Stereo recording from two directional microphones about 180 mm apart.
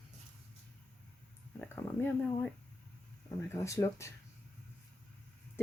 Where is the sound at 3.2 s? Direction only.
15° left (ahead or behind).